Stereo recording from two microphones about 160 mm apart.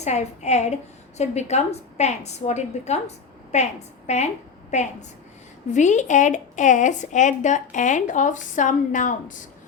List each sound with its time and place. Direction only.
0.0 s a woman's voice: 45° left (ahead or behind)